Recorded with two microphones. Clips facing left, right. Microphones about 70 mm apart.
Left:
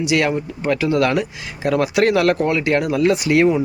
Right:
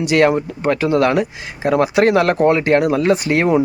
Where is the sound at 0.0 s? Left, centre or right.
Right.